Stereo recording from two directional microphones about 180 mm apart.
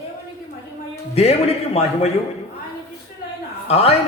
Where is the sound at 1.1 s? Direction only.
35° left (ahead or behind).